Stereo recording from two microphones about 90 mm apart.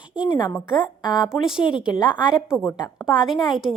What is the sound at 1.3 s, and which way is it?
Speech, 5° right (ahead or behind).